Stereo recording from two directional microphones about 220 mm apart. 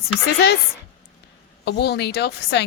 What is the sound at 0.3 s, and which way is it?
Speech, 45° left (ahead or behind).